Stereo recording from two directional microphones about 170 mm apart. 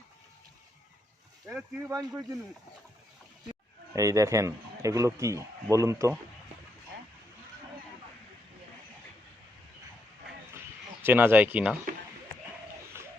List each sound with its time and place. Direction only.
1.5 s speech: 10° right (ahead or behind)
3.5 s speech: 20° right (ahead or behind)
11.0 s speech: 10° right (ahead or behind)